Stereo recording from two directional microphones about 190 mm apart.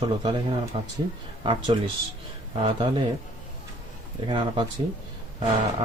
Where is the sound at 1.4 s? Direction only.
25° right (ahead or behind).